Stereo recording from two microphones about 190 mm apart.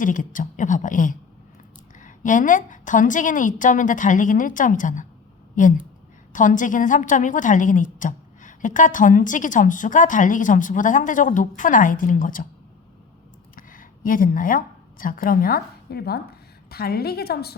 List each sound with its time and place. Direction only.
0.0 s a woman's voice: 45° left (ahead or behind)
13.6 s a woman's voice: 45° left (ahead or behind)